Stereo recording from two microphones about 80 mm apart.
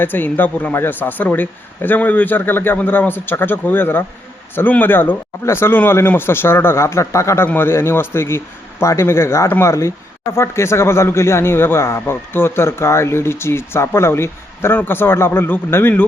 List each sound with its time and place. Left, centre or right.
0.0 s a man's voice: left
7.4 s speech: left